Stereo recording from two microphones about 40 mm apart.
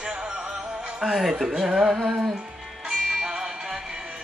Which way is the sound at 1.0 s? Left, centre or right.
Centre.